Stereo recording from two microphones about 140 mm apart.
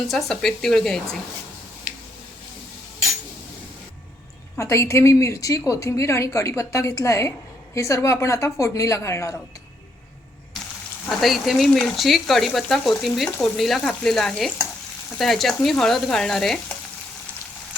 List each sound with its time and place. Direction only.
0.1 s speech: 5° left (ahead or behind)
4.5 s a woman's voice: 20° left (ahead or behind)
11.2 s speech: centre (ahead or behind)